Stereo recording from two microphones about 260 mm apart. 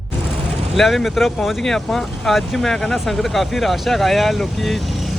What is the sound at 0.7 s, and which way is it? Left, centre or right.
Speech, centre.